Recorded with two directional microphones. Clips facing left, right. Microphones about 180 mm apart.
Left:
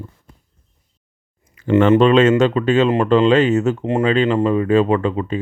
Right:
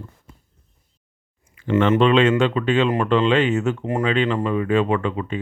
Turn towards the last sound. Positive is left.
turn(degrees=35)  # may be behind; listen again after turning